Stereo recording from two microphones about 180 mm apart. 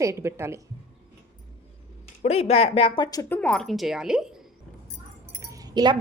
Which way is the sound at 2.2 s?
35° left (ahead or behind).